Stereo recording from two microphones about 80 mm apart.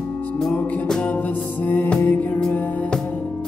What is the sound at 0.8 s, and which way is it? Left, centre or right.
Music, centre.